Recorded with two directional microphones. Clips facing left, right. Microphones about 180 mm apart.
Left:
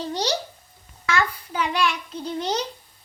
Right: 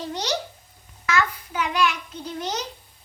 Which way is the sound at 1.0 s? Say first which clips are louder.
Even; 30° left (ahead or behind).